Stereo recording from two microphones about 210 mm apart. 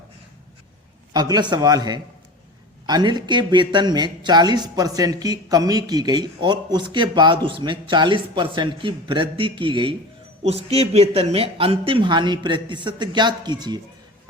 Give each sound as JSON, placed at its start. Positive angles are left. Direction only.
{"t": 1.1, "sound": "speech", "side_deg": -20}